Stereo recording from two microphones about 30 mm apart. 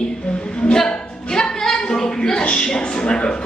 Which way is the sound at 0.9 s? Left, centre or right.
Left.